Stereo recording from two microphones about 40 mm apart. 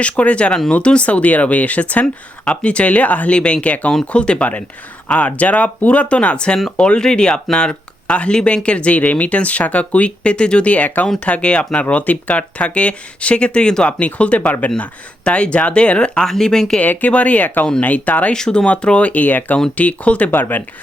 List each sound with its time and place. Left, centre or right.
0.0 s speech: left
3.3 s speech: left
5.0 s speech: left
11.3 s speech: left
14.0 s speech: left
16.2 s speech: centre
16.8 s speech: left
17.1 s speech: left
18.3 s speech: left
20.3 s speech: left